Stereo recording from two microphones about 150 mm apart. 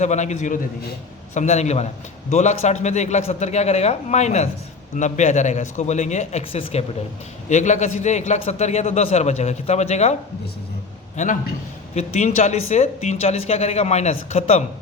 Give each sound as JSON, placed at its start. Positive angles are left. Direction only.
{"t": 0.0, "sound": "speech", "side_deg": 50}
{"t": 11.2, "sound": "speech", "side_deg": 55}